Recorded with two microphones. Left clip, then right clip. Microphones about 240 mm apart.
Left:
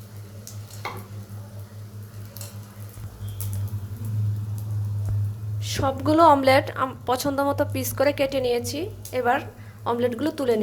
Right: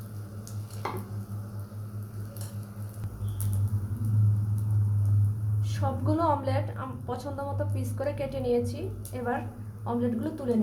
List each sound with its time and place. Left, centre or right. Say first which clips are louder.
5.6 s a woman's voice: left 8 dB; left